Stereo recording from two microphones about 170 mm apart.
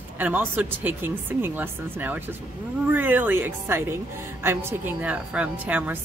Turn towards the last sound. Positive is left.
turn(degrees=-10)  # may be behind; listen again after turning